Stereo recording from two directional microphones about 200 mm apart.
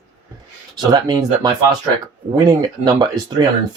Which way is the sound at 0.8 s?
20° right (ahead or behind).